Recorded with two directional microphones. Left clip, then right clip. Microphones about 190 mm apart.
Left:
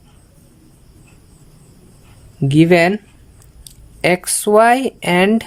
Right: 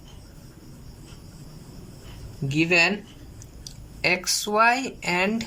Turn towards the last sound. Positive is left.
turn(degrees=40)  # may be behind; listen again after turning